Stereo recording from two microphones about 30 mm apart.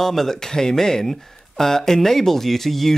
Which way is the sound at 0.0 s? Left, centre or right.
Centre.